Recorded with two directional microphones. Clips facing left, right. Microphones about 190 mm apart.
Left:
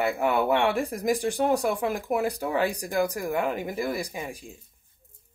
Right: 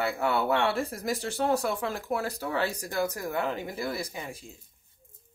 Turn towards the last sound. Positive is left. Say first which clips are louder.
# left 4 dB
turn(degrees=15)  # may be behind; listen again after turning